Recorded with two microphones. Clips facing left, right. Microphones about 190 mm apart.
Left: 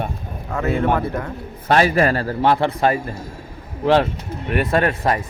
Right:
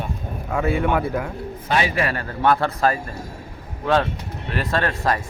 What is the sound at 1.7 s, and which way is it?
Speech, 50° left (ahead or behind).